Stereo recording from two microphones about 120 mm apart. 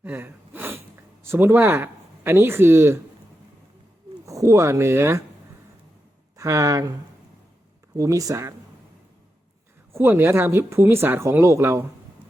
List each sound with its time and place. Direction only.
0.0 s a sound: 15° right (ahead or behind)
1.2 s speech: 20° right (ahead or behind)
4.3 s speech: 25° right (ahead or behind)
6.3 s speech: 25° right (ahead or behind)
7.9 s speech: 30° right (ahead or behind)
9.9 s speech: 20° right (ahead or behind)